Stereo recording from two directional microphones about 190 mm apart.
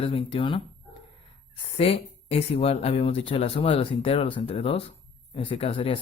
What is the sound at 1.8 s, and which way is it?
Speech, 30° left (ahead or behind).